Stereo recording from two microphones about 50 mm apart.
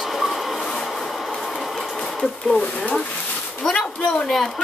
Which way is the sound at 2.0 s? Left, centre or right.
Centre.